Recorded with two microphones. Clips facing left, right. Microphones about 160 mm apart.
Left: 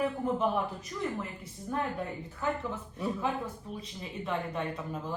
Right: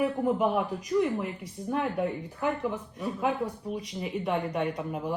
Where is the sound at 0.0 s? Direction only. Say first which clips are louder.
Right 4 dB; 10° right (ahead or behind).